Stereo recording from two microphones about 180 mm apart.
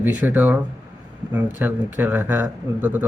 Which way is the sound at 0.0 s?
10° right (ahead or behind).